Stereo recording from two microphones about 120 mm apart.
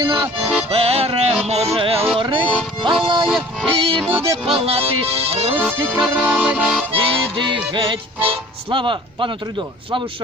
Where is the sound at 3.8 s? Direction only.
50° right (ahead or behind).